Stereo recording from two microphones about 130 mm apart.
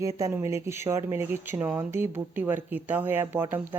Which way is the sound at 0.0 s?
25° right (ahead or behind).